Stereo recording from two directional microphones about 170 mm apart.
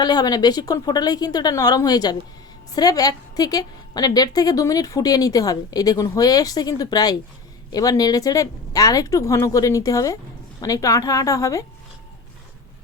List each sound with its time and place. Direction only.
0.0 s a woman's voice: 25° left (ahead or behind)